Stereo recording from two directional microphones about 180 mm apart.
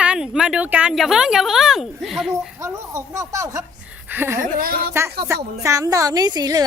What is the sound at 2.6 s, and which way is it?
Speech, 15° right (ahead or behind).